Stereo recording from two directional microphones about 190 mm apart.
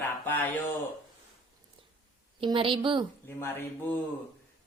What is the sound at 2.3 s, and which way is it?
Speech, 25° right (ahead or behind).